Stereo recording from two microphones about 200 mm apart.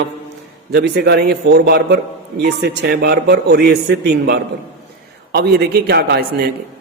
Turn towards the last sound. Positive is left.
turn(degrees=-50)  # may be behind; listen again after turning